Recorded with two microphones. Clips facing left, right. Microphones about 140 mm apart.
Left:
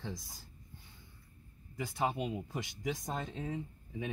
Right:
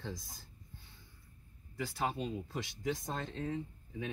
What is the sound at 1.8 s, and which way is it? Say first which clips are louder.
Speech: left 2 dB; 20° left (ahead or behind).